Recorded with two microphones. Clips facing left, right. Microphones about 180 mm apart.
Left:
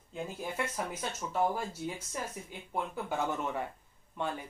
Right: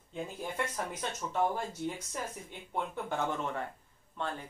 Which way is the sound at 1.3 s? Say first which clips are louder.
Left 1 dB; 5° left (ahead or behind).